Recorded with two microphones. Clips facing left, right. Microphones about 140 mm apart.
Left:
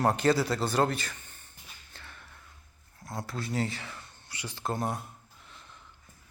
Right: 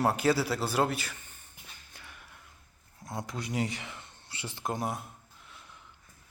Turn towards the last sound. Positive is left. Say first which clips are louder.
# left 1 dB
turn(degrees=-15)  # may be behind; listen again after turning